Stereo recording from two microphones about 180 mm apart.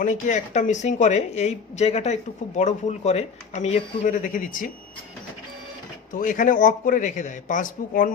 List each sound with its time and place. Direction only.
0.0 s speech: 45° left (ahead or behind)
6.1 s speech: 45° left (ahead or behind)